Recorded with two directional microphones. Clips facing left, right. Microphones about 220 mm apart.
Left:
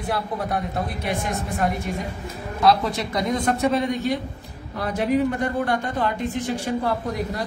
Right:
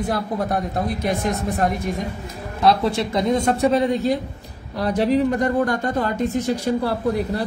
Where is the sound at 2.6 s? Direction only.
30° right (ahead or behind).